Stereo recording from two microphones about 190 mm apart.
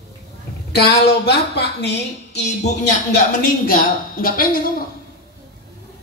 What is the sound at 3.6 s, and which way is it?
Speech, 50° left (ahead or behind).